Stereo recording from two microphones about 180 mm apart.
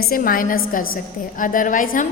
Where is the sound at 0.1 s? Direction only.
50° left (ahead or behind).